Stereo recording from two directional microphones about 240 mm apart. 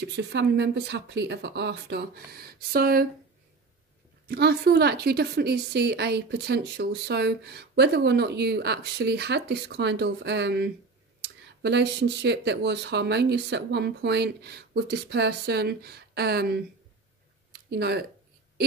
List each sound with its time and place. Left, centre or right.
0.0 s a woman's voice: right
4.3 s a woman's voice: right
17.5 s a sound: right